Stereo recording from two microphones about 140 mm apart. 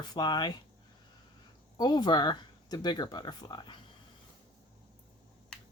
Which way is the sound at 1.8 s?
30° left (ahead or behind).